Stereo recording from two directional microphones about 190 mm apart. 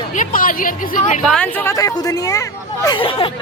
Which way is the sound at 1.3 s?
5° left (ahead or behind).